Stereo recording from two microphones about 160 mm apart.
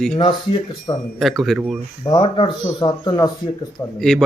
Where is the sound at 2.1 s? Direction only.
30° left (ahead or behind).